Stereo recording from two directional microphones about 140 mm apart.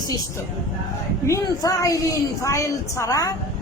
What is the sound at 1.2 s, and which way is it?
A woman's voice, 20° left (ahead or behind).